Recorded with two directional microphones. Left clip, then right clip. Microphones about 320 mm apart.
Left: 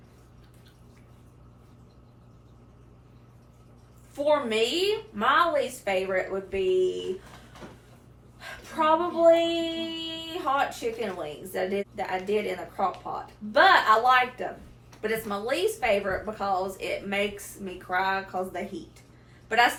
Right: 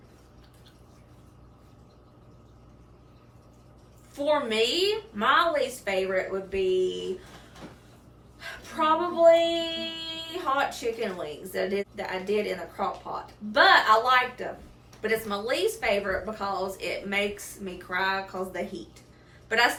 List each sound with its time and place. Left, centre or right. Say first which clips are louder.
4.1 s speech: left 1 dB; centre
8.4 s child singing: left 1 dB; centre
13.1 s speech: left 1 dB; centre